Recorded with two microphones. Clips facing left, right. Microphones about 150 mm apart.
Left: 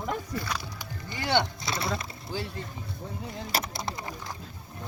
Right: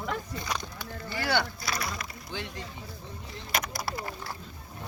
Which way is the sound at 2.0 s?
30° left (ahead or behind).